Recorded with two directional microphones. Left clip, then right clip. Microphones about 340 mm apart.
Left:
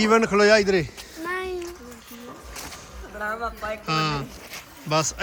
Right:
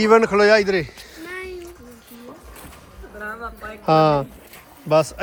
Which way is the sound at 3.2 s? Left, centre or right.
Centre.